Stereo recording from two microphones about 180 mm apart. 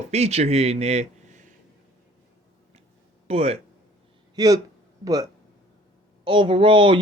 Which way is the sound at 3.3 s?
35° right (ahead or behind).